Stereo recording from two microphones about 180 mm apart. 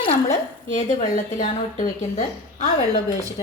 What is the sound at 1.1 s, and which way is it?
A woman's voice, 45° left (ahead or behind).